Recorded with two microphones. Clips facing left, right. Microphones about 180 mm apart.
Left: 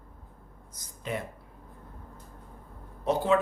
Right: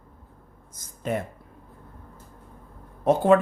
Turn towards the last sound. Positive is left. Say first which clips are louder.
# right 7 dB
turn(degrees=-55)  # may be behind; listen again after turning